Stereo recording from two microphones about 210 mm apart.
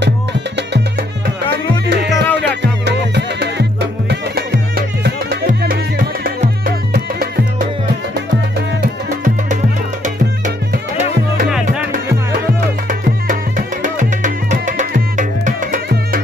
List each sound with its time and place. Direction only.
0.6 s music: 55° right (ahead or behind)
13.8 s music: 35° right (ahead or behind)